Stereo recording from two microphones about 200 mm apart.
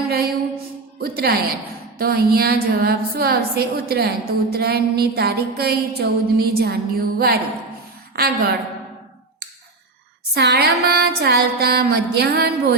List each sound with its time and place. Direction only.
0.1 s music: 50° right (ahead or behind)
0.9 s a woman's voice: 50° right (ahead or behind)
10.3 s a woman's voice: 55° right (ahead or behind)